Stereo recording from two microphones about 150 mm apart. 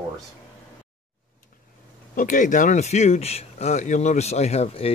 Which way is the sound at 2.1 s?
55° left (ahead or behind).